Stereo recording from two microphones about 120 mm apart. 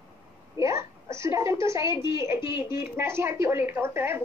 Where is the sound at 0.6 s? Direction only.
25° right (ahead or behind).